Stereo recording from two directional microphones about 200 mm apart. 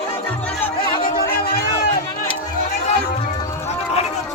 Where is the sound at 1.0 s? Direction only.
50° left (ahead or behind).